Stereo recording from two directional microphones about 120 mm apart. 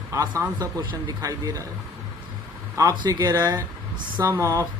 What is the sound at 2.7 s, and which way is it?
A man's voice, 30° right (ahead or behind).